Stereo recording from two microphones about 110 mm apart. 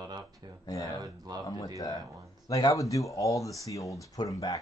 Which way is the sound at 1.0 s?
40° right (ahead or behind).